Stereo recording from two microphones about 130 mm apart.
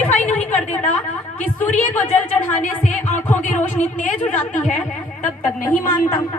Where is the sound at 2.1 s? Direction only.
15° left (ahead or behind).